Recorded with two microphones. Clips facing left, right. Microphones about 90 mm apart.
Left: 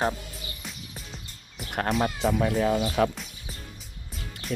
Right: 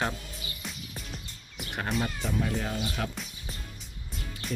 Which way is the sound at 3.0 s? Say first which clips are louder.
Left 14 dB; 90° left.